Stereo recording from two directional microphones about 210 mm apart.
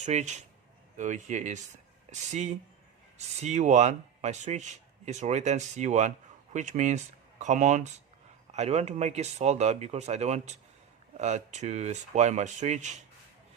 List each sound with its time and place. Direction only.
0.0 s speech: 35° right (ahead or behind)